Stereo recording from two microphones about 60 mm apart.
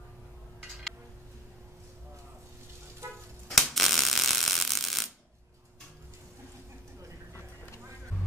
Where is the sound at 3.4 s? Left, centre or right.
Centre.